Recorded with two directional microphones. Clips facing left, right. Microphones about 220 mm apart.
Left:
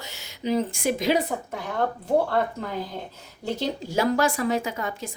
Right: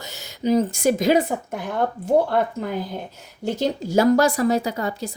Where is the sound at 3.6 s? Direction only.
40° right (ahead or behind).